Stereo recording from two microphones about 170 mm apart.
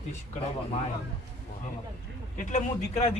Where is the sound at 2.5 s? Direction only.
40° left (ahead or behind).